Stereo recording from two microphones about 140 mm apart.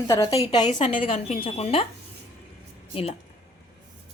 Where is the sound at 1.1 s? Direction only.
50° left (ahead or behind).